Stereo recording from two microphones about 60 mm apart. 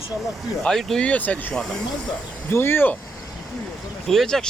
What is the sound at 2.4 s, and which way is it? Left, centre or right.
Speech, left.